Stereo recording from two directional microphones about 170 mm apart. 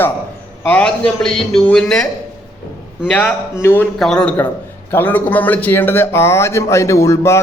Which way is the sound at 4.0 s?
5° left (ahead or behind).